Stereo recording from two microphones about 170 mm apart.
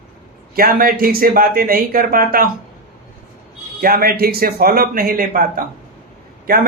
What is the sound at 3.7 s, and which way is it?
A man's voice, 60° right (ahead or behind).